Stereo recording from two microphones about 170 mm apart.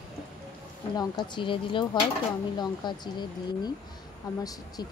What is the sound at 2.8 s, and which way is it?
Speech, 25° left (ahead or behind).